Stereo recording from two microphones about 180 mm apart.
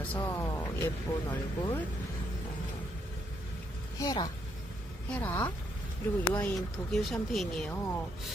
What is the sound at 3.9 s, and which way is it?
Speech, 20° left (ahead or behind).